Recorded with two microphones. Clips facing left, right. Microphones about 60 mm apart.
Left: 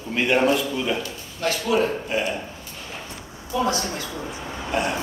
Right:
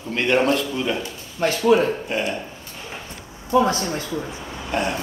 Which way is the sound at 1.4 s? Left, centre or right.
Right.